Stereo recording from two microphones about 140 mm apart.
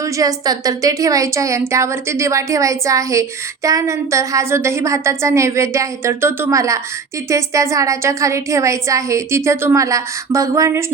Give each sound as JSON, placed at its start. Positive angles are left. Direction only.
{"t": 0.0, "sound": "a woman's voice", "side_deg": -25}